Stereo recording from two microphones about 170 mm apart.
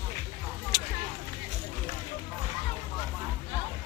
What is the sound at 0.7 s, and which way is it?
Vehicle, 25° right (ahead or behind).